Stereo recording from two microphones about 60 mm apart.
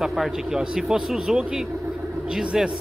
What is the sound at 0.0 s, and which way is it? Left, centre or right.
Speech, centre.